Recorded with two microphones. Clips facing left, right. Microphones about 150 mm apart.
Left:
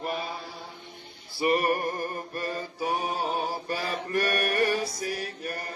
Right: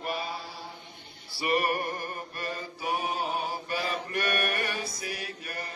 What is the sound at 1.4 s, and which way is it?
Mantra, 35° left (ahead or behind).